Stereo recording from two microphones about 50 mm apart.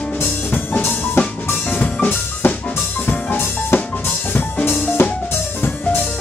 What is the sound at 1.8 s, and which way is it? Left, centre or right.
Music, left.